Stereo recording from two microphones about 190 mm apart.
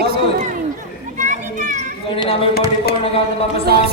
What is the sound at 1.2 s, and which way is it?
Children playing, 40° right (ahead or behind).